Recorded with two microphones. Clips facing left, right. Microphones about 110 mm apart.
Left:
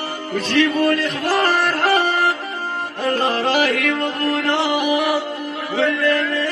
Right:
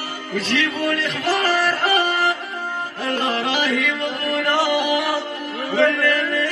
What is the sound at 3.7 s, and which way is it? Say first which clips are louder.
Music: left 2 dB; 50° left (ahead or behind).